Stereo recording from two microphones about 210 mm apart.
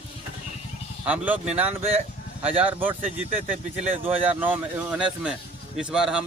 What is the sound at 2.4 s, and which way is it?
Speech, 25° right (ahead or behind).